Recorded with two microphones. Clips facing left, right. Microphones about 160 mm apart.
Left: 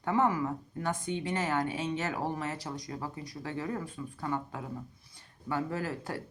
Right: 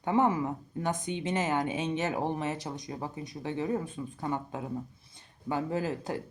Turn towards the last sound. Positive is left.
turn(degrees=-20)  # may be behind; listen again after turning